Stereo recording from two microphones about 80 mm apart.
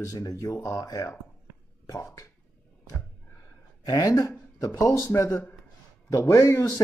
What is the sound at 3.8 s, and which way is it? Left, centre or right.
A woman's voice, left.